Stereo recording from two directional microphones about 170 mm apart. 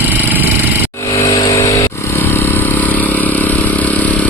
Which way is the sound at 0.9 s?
20° left (ahead or behind).